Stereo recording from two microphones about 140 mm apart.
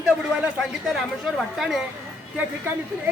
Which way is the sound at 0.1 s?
5° right (ahead or behind).